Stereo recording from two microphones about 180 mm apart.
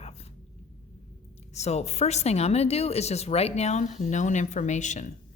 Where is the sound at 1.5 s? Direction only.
35° left (ahead or behind).